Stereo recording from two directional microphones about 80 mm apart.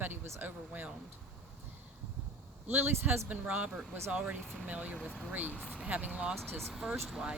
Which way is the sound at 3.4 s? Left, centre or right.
Centre.